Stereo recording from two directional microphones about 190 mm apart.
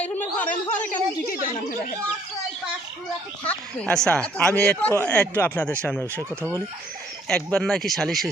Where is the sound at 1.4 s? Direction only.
45° left (ahead or behind).